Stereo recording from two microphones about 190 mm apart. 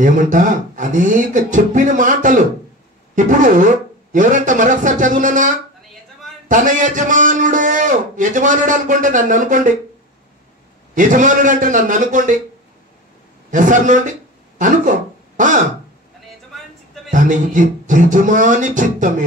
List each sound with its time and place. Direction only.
0.0 s a man's voice: 45° right (ahead or behind)
6.5 s a man's voice: 40° right (ahead or behind)
11.0 s a man's voice: 40° right (ahead or behind)
13.5 s a man's voice: 40° right (ahead or behind)
17.1 s a man's voice: 45° right (ahead or behind)